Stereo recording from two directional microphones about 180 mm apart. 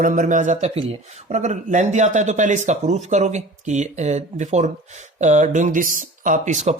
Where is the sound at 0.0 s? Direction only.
45° right (ahead or behind).